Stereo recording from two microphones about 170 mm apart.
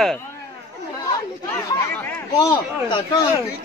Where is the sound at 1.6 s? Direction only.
20° left (ahead or behind).